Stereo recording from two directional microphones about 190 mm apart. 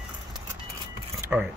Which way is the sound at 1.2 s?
10° right (ahead or behind).